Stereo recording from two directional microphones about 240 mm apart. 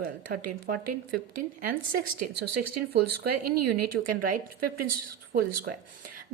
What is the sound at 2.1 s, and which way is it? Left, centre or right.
Speech, right.